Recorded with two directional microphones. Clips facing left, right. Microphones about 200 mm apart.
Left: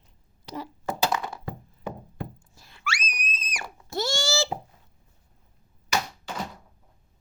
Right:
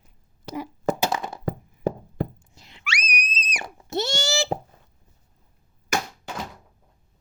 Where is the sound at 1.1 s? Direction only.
20° right (ahead or behind).